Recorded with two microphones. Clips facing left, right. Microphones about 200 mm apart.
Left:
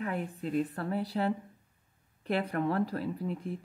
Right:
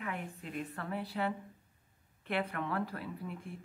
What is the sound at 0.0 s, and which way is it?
Speech, 35° left (ahead or behind).